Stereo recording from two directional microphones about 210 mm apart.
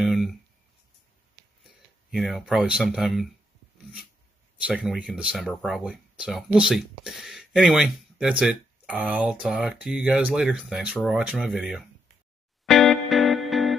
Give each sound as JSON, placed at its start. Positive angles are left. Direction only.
{"t": 0.0, "sound": "a sound", "side_deg": 0}
{"t": 1.6, "sound": "speech", "side_deg": 0}
{"t": 4.6, "sound": "speech", "side_deg": -5}
{"t": 12.6, "sound": "music", "side_deg": 0}